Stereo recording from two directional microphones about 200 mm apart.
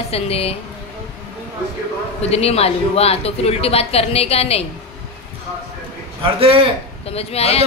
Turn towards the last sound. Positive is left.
turn(degrees=30)  # may be behind; listen again after turning